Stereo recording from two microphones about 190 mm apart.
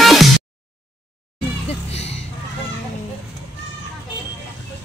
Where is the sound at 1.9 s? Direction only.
35° left (ahead or behind).